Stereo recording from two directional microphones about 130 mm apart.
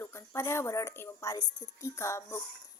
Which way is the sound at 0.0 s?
20° left (ahead or behind).